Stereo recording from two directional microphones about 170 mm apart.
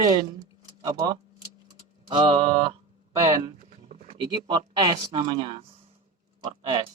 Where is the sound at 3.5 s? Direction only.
50° right (ahead or behind).